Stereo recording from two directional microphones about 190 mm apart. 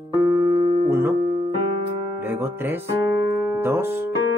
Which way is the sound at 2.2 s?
10° right (ahead or behind).